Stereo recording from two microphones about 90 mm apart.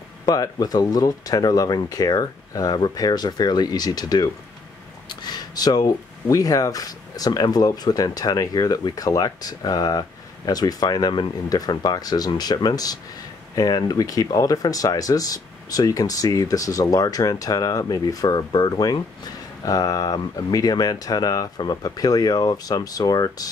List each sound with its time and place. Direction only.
0.2 s speech: 45° left (ahead or behind)